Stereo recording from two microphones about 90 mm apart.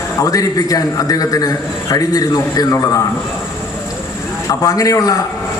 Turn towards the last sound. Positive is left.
turn(degrees=40)  # may be behind; listen again after turning